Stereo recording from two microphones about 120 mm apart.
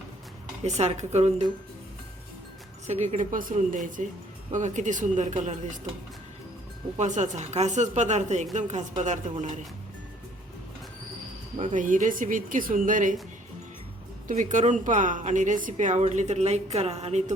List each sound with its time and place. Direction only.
0.6 s speech: 70° right (ahead or behind)
2.8 s speech: 70° right (ahead or behind); by 5.8 s 90° right
6.9 s speech: 75° right (ahead or behind)
8.5 s speech: 85° right
11.5 s speech: 85° right
14.3 s a woman's voice: 90° right; by 17.3 s 70° right (ahead or behind)